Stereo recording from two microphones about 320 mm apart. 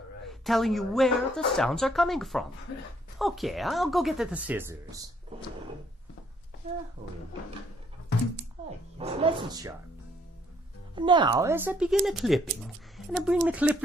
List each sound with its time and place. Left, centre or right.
0.3 s a woman's voice: centre
6.6 s speech: right
9.0 s speech: centre
10.9 s speech: centre